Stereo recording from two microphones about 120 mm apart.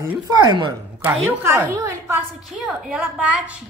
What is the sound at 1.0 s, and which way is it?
Speech, 10° right (ahead or behind).